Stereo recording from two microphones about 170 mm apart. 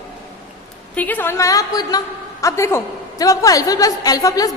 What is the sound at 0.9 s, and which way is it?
A woman's voice, 10° left (ahead or behind).